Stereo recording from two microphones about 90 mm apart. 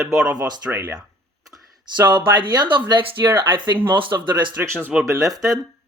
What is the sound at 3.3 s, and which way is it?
Speech, 55° right (ahead or behind).